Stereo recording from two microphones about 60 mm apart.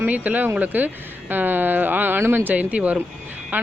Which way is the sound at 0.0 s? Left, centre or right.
Right.